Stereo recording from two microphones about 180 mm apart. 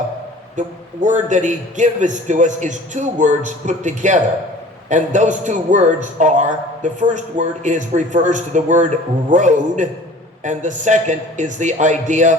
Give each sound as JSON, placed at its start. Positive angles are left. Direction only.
{"t": 1.0, "sound": "a man's voice", "side_deg": -45}